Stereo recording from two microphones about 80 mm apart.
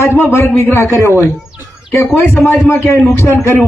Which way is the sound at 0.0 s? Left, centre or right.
Left.